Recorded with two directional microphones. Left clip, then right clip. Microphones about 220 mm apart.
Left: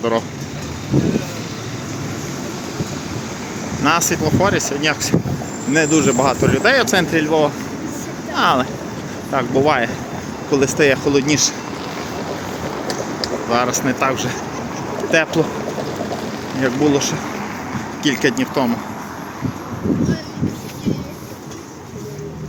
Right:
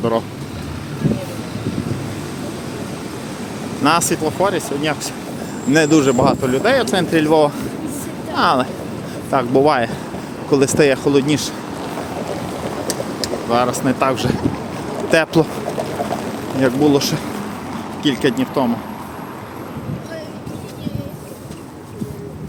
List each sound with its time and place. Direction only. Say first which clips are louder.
3.8 s speech: right 1 dB; 15° right (ahead or behind)
5.7 s speech: right 2 dB; 15° right (ahead or behind)
7.2 s speech: right 2 dB; 20° right (ahead or behind)
13.5 s speech: right 1 dB; 10° right (ahead or behind); by 15.4 s 25° right (ahead or behind)
16.6 s speech: right 2 dB; 15° right (ahead or behind)
18.0 s speech: even; 10° right (ahead or behind)